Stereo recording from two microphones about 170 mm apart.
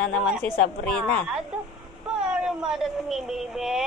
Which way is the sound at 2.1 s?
5° right (ahead or behind).